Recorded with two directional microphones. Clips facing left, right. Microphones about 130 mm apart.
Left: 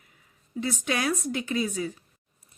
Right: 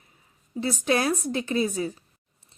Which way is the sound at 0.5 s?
35° right (ahead or behind).